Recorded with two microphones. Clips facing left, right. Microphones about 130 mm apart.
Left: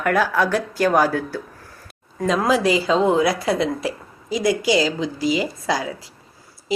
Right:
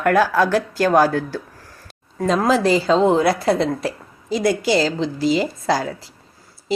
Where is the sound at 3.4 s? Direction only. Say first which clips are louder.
Right 2 dB; 30° right (ahead or behind).